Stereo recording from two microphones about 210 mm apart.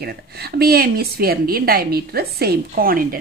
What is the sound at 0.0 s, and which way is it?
A woman's voice, 50° right (ahead or behind).